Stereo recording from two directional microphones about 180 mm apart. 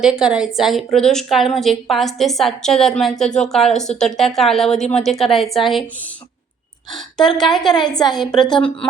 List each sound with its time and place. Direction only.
0.0 s a woman's voice: 5° right (ahead or behind)
6.9 s a woman's voice: centre (ahead or behind)
7.9 s speech: 20° left (ahead or behind)